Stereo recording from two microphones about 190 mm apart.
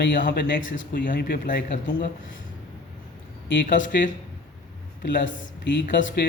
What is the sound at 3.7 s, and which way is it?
Speech, 75° left (ahead or behind).